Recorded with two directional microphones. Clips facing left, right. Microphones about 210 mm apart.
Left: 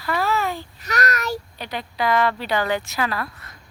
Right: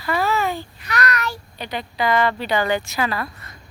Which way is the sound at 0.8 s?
40° left (ahead or behind).